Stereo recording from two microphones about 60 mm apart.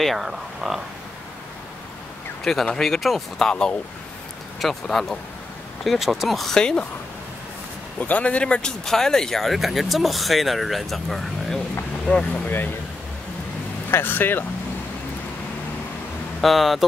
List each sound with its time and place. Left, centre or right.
0.0 s speech: centre
2.4 s speech: centre
8.0 s speech: left; by 11.6 s centre
13.8 s speech: left
16.3 s speech: centre